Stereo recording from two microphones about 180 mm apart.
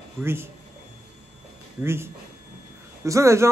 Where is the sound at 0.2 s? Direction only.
15° right (ahead or behind).